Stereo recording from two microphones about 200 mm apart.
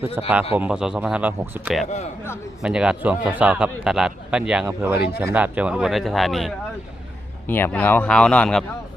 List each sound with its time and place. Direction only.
0.2 s speech: 10° right (ahead or behind)